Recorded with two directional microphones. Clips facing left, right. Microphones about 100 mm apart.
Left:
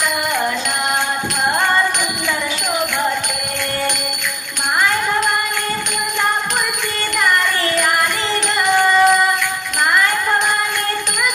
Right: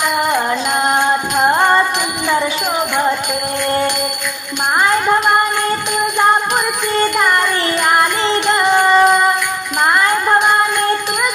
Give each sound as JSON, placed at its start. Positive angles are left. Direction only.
{"t": 8.7, "sound": "music", "side_deg": -30}